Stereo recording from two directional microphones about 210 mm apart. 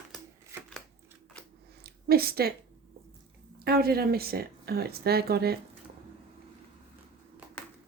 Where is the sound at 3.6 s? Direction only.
45° right (ahead or behind).